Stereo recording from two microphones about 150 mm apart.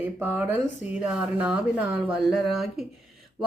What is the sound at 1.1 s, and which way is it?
Speech, 5° right (ahead or behind).